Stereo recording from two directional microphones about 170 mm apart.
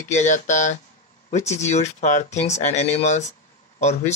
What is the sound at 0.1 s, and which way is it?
Speech, 45° left (ahead or behind).